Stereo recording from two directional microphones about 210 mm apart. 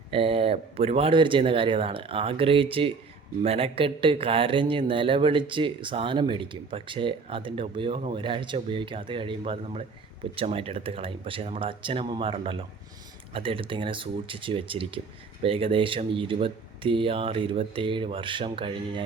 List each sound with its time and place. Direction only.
0.1 s speech: 25° right (ahead or behind)